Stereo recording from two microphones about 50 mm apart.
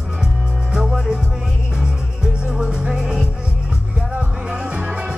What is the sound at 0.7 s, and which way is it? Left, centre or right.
Music, centre.